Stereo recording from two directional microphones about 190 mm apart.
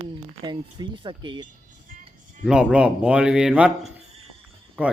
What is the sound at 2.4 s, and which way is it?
Speech, 5° right (ahead or behind).